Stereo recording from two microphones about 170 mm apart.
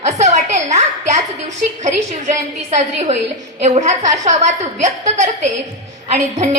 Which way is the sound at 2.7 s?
40° right (ahead or behind).